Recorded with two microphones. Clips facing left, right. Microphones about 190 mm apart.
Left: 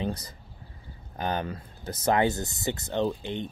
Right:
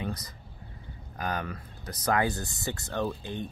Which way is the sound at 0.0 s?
30° left (ahead or behind).